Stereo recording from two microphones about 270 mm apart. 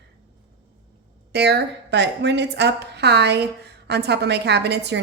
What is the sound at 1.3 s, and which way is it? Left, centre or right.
A woman's voice, right.